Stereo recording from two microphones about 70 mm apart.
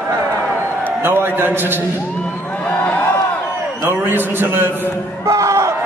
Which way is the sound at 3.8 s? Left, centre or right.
Right.